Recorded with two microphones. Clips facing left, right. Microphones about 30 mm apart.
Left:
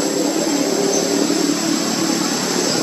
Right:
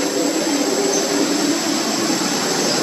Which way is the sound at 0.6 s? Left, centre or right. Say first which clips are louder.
Left 1 dB; centre.